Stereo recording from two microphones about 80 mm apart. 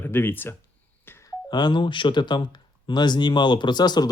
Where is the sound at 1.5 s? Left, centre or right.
Left.